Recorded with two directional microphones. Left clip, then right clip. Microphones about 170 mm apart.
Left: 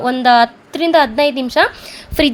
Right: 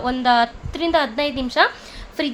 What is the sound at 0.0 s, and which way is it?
A woman's voice, 35° left (ahead or behind).